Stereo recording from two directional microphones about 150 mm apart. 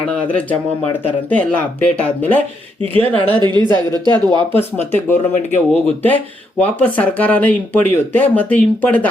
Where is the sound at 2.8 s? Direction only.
40° right (ahead or behind).